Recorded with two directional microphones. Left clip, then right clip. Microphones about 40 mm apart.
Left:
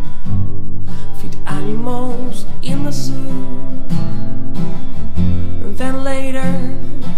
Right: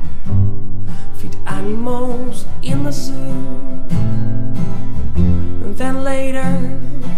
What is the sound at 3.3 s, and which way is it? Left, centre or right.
Music, right.